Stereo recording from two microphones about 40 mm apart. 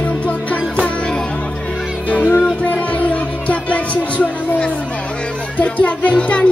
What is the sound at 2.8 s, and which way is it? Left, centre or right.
Music, left.